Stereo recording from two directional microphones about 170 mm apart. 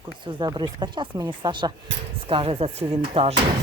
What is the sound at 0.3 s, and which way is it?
Speech, 25° right (ahead or behind).